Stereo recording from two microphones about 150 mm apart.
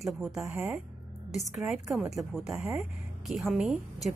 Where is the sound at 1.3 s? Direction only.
Centre (ahead or behind).